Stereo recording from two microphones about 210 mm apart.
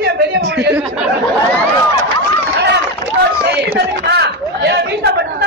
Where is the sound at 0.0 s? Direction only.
55° right (ahead or behind).